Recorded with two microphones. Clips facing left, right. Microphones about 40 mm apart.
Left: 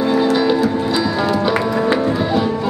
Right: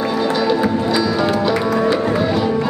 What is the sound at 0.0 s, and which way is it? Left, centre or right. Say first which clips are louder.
Music: left 3 dB; centre.